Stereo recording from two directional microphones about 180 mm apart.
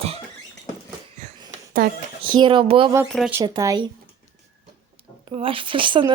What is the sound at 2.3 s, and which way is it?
Speech, 25° right (ahead or behind).